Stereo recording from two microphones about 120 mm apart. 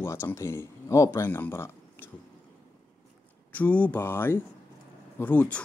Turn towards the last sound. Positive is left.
turn(degrees=15)  # may be behind; listen again after turning